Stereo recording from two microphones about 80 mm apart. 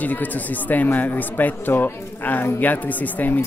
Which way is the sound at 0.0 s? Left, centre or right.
Left.